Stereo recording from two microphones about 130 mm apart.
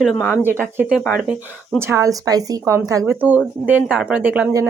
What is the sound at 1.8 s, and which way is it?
A woman's voice, 20° right (ahead or behind).